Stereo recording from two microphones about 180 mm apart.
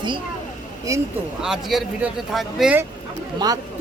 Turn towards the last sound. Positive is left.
turn(degrees=-20)  # may be behind; listen again after turning